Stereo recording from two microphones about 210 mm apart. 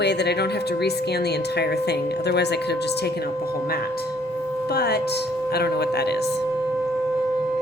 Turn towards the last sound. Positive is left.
turn(degrees=50)  # may be behind; listen again after turning